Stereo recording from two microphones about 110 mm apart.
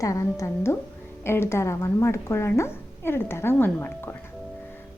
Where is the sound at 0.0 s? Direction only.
30° left (ahead or behind).